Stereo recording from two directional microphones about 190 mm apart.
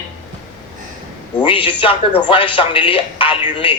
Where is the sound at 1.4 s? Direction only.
25° left (ahead or behind).